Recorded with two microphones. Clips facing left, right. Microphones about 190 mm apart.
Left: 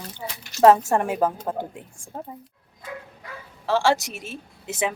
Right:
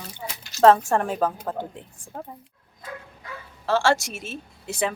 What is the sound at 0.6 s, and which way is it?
Speech, 10° left (ahead or behind).